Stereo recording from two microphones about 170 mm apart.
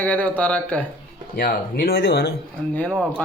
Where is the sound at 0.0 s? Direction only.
10° left (ahead or behind).